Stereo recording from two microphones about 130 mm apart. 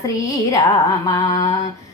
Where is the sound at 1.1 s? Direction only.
30° left (ahead or behind).